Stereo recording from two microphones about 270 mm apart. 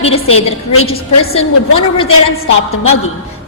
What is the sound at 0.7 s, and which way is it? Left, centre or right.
Speech, left.